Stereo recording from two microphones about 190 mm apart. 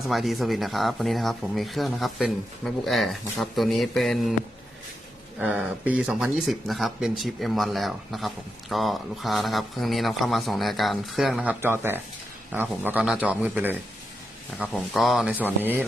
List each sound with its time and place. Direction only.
0.1 s speech: centre (ahead or behind)
5.4 s speech: 5° right (ahead or behind)